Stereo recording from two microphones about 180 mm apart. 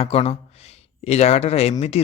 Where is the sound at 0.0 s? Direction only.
35° left (ahead or behind).